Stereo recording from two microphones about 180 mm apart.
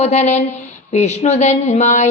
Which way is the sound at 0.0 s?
40° left (ahead or behind).